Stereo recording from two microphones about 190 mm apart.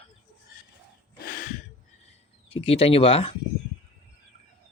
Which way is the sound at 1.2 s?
50° left (ahead or behind).